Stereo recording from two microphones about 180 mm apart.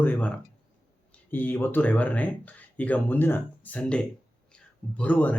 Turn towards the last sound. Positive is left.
turn(degrees=10)  # may be behind; listen again after turning